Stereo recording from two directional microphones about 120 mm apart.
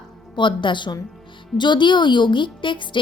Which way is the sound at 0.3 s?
40° left (ahead or behind).